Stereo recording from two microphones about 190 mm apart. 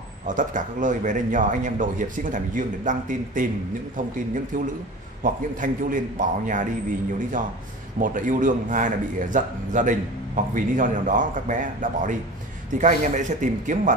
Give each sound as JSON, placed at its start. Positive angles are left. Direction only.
{"t": 0.3, "sound": "a man's voice", "side_deg": -40}
{"t": 5.2, "sound": "a man's voice", "side_deg": -45}
{"t": 8.0, "sound": "a man's voice", "side_deg": -45}